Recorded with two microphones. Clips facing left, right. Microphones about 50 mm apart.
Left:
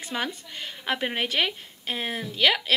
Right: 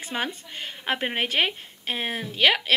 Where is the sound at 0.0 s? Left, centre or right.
Centre.